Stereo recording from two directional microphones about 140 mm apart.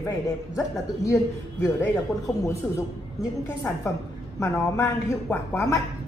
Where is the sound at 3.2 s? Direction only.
20° left (ahead or behind).